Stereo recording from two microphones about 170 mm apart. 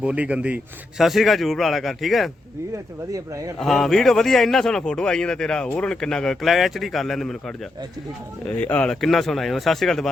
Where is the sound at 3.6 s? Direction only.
Centre (ahead or behind).